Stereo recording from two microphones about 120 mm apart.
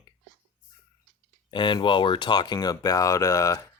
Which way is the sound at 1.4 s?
45° left (ahead or behind).